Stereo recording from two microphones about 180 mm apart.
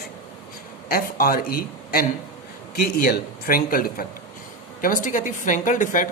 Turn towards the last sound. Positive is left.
turn(degrees=45)  # may be behind; listen again after turning